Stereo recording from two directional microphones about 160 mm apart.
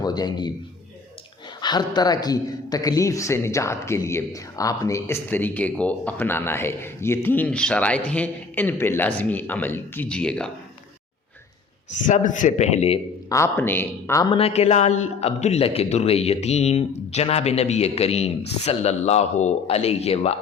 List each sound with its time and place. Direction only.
0.0 s a man's voice: 25° left (ahead or behind)
1.6 s a man's voice: 25° left (ahead or behind); by 10.5 s 5° left (ahead or behind)
12.0 s speech: 55° left (ahead or behind)
13.3 s a man's voice: 15° left (ahead or behind)
14.3 s a man's voice: 40° left (ahead or behind)